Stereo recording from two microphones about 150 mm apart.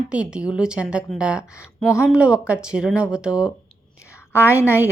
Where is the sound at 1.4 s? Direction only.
20° left (ahead or behind).